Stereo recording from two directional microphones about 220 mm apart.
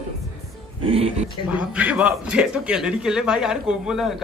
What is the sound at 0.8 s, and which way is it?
Speech, 25° right (ahead or behind).